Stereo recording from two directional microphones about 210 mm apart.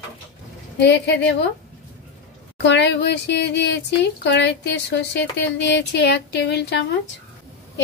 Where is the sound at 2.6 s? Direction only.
55° left (ahead or behind).